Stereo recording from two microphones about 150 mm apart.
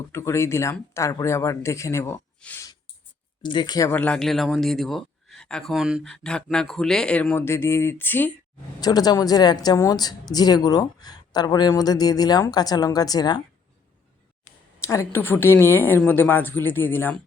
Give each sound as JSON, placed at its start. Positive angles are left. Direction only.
{"t": 0.1, "sound": "speech", "side_deg": 20}
{"t": 3.4, "sound": "speech", "side_deg": 30}
{"t": 3.9, "sound": "speech", "side_deg": 10}
{"t": 8.8, "sound": "speech", "side_deg": 25}
{"t": 14.8, "sound": "speech", "side_deg": 20}